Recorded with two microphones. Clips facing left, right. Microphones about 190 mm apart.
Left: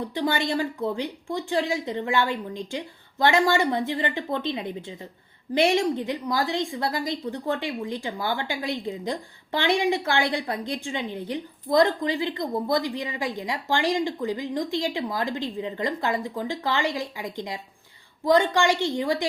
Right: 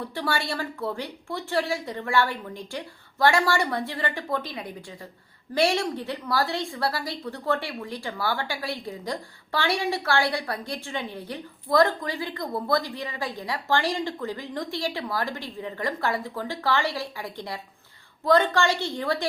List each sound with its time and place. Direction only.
0.1 s a woman's voice: 20° left (ahead or behind)